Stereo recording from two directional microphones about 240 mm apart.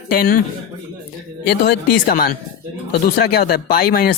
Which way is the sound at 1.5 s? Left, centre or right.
Left.